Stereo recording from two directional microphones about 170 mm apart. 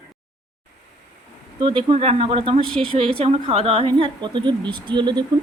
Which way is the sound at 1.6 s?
30° right (ahead or behind).